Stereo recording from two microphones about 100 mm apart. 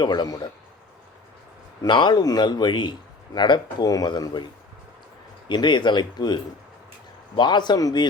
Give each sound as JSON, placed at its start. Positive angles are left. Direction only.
{"t": 0.0, "sound": "speech", "side_deg": 45}
{"t": 1.9, "sound": "speech", "side_deg": 50}
{"t": 5.5, "sound": "speech", "side_deg": 50}